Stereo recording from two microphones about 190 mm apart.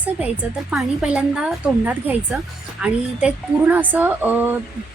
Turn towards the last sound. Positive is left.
turn(degrees=-10)  # may be behind; listen again after turning